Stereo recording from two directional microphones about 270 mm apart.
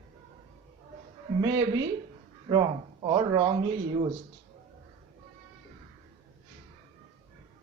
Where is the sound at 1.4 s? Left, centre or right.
Centre.